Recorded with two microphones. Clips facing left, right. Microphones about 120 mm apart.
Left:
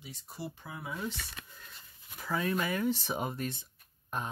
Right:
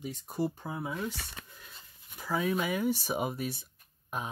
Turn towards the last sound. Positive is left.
turn(degrees=-5)  # may be behind; listen again after turning